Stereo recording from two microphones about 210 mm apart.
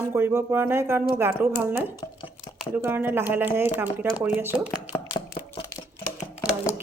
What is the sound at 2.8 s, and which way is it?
Speech, 10° right (ahead or behind).